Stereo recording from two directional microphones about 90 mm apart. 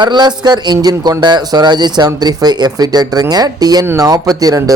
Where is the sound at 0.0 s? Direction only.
55° right (ahead or behind).